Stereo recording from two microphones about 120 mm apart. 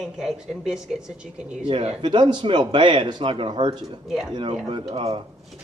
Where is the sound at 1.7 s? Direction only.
60° right (ahead or behind).